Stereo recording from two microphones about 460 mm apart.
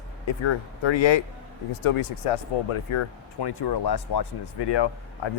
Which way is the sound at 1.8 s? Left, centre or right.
Left.